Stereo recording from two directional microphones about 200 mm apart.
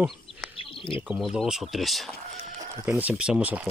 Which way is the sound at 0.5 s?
25° left (ahead or behind).